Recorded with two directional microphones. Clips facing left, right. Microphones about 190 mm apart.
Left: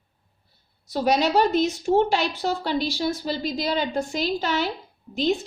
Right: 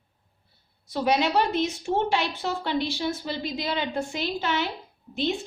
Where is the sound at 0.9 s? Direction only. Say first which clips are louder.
Left 2 dB; 40° left (ahead or behind).